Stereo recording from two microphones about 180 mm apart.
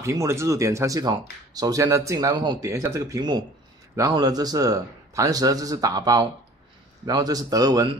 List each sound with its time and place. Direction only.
0.0 s a man's voice: 15° right (ahead or behind)